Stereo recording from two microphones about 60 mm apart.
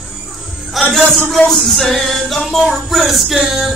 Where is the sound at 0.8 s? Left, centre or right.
Centre.